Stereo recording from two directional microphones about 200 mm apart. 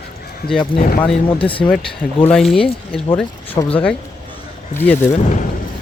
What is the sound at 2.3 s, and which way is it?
Speech, centre (ahead or behind).